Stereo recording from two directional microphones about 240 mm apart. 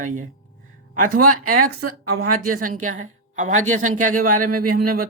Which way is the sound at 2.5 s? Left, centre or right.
Right.